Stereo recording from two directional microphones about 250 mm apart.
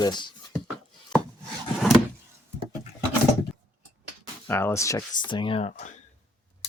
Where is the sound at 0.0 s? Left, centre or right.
Centre.